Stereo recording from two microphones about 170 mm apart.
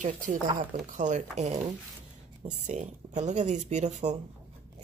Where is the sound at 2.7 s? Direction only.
45° right (ahead or behind).